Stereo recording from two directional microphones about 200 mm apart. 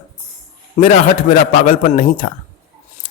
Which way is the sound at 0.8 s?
40° left (ahead or behind).